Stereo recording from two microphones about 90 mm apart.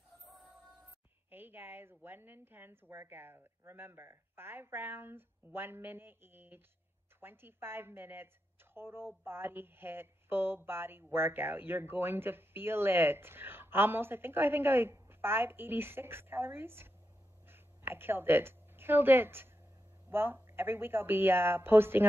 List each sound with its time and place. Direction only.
0.3 s music: centre (ahead or behind)
1.3 s a woman's voice: 25° right (ahead or behind)